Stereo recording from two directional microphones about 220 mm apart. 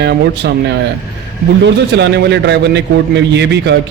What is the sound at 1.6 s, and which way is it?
Speech, 50° right (ahead or behind).